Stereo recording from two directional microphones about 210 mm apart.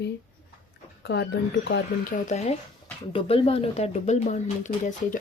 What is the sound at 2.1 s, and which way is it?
Speech, 35° left (ahead or behind).